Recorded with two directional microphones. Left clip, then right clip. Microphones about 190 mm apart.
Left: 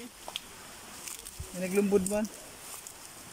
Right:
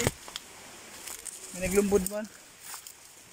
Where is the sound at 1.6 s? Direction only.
Centre (ahead or behind).